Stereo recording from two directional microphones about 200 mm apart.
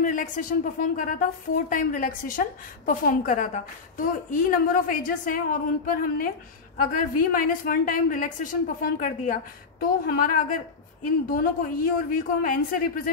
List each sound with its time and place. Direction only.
0.0 s speech: 40° left (ahead or behind)